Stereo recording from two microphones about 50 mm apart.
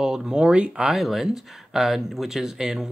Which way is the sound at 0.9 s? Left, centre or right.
Centre.